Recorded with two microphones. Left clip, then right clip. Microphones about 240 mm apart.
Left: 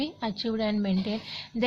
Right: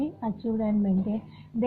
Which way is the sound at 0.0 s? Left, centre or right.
Left.